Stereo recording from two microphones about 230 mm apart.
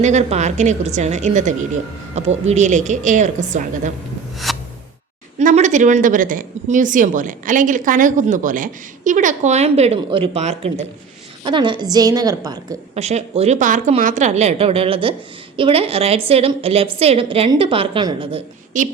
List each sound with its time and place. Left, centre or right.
0.0 s speech: right
4.5 s a sound: centre
5.4 s a woman's voice: right; by 12.5 s centre
12.9 s a woman's voice: right